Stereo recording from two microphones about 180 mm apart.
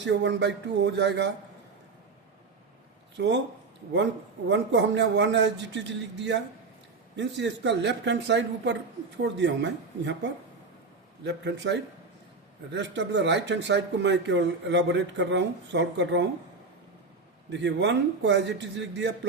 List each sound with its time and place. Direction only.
0.0 s a man's voice: 85° right
3.2 s a man's voice: 75° right (ahead or behind)
11.2 s a man's voice: 75° right (ahead or behind)
17.5 s a man's voice: 80° right